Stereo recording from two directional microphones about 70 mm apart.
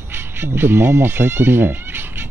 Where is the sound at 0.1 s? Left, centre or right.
Right.